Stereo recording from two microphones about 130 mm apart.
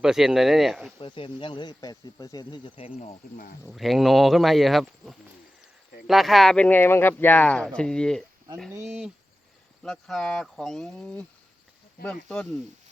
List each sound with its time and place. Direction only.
0.0 s speech: 5° right (ahead or behind)
0.9 s speech: 40° left (ahead or behind)
3.7 s speech: centre (ahead or behind)
8.7 s speech: 20° right (ahead or behind)
9.8 s speech: 5° left (ahead or behind)